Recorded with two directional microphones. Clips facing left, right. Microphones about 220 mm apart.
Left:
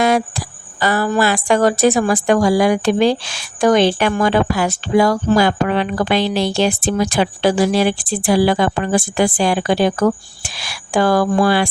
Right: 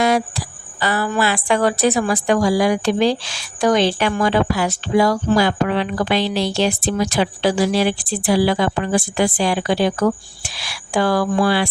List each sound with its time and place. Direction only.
0.0 s speech: 50° left (ahead or behind)